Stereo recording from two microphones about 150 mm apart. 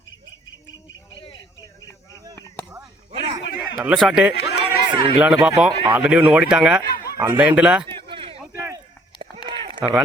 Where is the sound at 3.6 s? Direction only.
5° right (ahead or behind).